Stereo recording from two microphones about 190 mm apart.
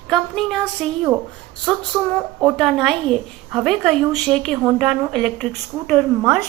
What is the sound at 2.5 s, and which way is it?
A woman's voice, centre (ahead or behind).